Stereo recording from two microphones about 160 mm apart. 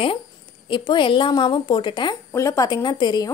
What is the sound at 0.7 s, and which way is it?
A woman's voice, 30° left (ahead or behind).